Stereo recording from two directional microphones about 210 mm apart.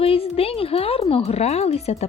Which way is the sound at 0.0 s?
25° left (ahead or behind).